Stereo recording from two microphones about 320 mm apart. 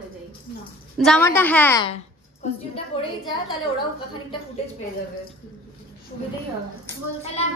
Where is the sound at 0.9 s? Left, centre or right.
Centre.